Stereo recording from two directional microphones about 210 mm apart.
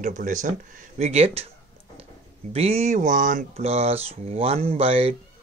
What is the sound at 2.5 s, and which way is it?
Speech, 30° right (ahead or behind).